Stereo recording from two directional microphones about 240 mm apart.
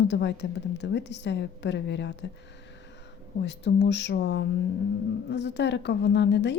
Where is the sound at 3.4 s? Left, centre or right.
Left.